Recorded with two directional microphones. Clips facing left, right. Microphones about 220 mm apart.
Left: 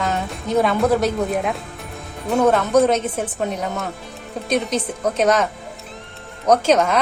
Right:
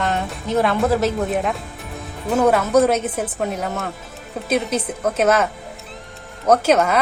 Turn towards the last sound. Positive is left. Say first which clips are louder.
# even
turn(degrees=-10)  # may be behind; listen again after turning